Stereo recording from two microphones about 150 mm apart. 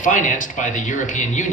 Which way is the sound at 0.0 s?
55° left (ahead or behind).